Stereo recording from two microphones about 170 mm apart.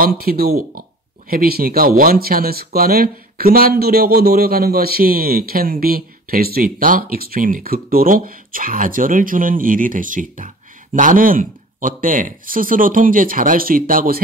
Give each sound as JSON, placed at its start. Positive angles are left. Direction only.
{"t": 0.0, "sound": "speech", "side_deg": -60}